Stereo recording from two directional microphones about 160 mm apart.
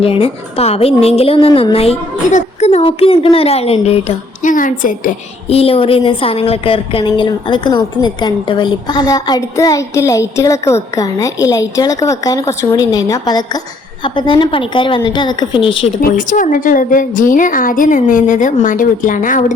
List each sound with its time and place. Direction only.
0.0 s a woman's voice: 35° left (ahead or behind)
4.5 s a woman's voice: 55° left (ahead or behind)
5.5 s a woman's voice: 35° left (ahead or behind)
16.0 s a woman's voice: 60° left (ahead or behind)